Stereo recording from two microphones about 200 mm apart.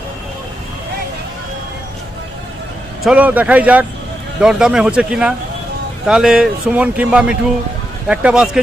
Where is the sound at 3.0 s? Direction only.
5° right (ahead or behind).